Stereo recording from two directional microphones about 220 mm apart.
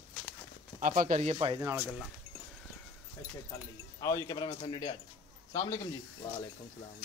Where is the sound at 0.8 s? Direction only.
40° right (ahead or behind); by 1.8 s 15° right (ahead or behind).